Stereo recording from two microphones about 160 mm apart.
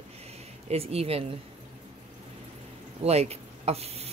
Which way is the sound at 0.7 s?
40° right (ahead or behind).